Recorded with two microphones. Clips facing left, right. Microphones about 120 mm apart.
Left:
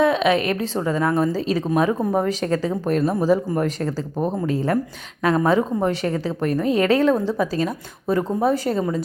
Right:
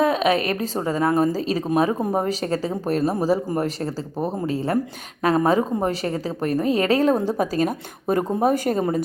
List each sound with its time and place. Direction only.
0.0 s a woman's voice: 40° right (ahead or behind)